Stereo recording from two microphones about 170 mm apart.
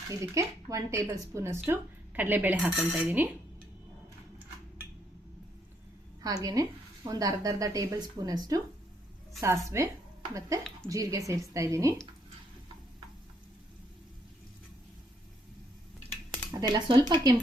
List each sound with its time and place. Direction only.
0.2 s speech: 20° right (ahead or behind)
6.2 s a woman's voice: 20° right (ahead or behind)
9.6 s a woman's voice: 15° right (ahead or behind)
16.5 s a woman's voice: 25° right (ahead or behind)